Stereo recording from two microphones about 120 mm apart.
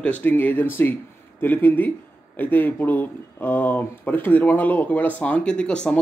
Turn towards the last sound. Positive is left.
turn(degrees=10)  # may be behind; listen again after turning